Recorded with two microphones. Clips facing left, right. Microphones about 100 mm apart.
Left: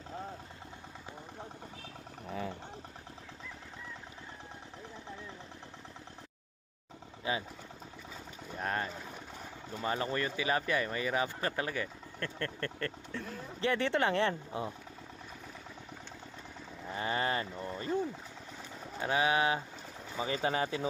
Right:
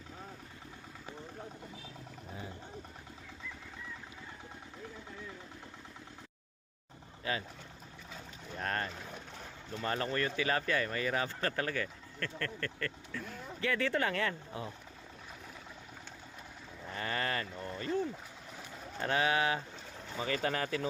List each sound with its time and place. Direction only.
2.2 s a sound: 70° left (ahead or behind)
7.2 s speech: 20° left (ahead or behind)
8.5 s boat: 10° left (ahead or behind)
9.8 s speech: 15° left (ahead or behind)
16.9 s speech: 20° left (ahead or behind)
17.8 s speech: 10° left (ahead or behind)